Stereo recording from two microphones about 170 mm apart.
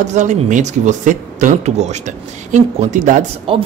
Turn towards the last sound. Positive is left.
turn(degrees=-35)  # may be behind; listen again after turning